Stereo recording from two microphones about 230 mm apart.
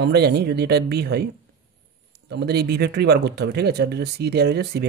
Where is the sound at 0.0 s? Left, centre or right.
Right.